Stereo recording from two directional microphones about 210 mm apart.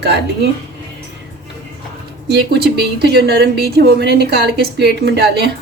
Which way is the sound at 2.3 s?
50° right (ahead or behind).